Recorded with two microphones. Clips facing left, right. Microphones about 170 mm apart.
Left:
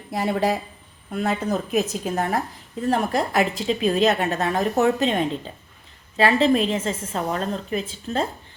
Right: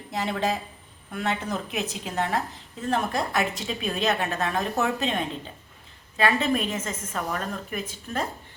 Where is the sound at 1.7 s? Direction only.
35° left (ahead or behind).